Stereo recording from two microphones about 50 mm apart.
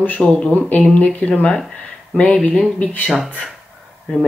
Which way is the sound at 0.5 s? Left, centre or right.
Left.